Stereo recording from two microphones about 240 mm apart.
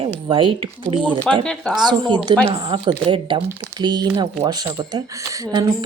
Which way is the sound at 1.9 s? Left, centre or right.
Centre.